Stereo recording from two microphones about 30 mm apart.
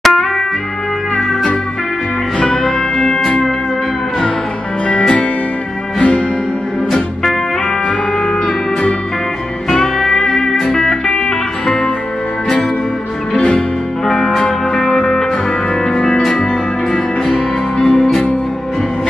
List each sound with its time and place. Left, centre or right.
0.0 s music: centre
2.4 s music: left
4.8 s music: left
10.0 s music: centre
14.0 s music: centre
17.7 s music: centre